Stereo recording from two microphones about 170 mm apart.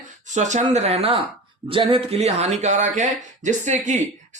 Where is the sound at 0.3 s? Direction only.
45° right (ahead or behind).